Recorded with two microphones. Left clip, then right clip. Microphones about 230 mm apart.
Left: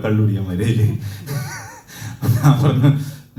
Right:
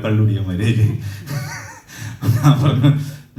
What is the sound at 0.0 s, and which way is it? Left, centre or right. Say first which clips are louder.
Speech: even; left.